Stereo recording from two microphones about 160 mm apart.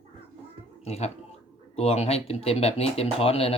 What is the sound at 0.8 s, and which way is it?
Speech, 40° left (ahead or behind).